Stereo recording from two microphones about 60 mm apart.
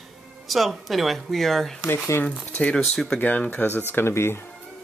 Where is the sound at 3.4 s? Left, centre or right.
Left.